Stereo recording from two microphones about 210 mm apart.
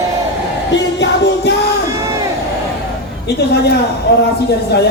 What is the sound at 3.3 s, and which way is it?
A man's voice, 50° left (ahead or behind).